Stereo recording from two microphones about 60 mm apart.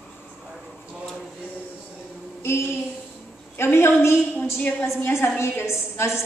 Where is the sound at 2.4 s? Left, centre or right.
Left.